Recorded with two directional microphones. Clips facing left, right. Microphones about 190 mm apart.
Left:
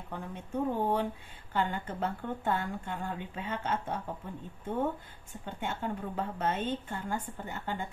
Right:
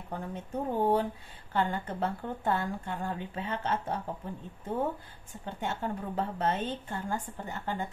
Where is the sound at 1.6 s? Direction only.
35° right (ahead or behind).